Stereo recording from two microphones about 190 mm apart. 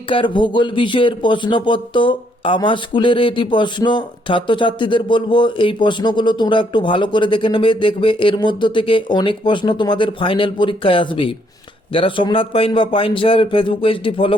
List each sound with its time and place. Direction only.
0.1 s speech: 25° left (ahead or behind)